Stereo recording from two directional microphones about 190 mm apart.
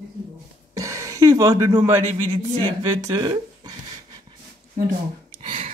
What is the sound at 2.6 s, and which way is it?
Speech, 25° right (ahead or behind).